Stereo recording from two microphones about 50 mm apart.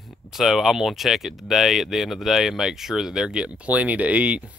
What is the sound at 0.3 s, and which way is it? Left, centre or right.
Speech, centre.